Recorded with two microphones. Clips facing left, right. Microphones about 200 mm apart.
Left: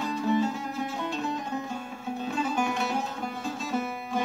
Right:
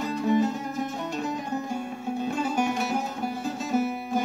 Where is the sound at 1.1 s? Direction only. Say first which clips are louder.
Right 2 dB; 15° right (ahead or behind).